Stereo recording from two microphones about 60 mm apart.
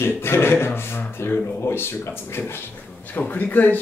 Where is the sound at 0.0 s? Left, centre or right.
Left.